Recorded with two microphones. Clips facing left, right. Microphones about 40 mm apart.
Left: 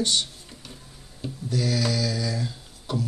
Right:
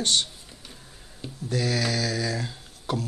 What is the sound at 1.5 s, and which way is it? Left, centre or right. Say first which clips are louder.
Mantra: even; right.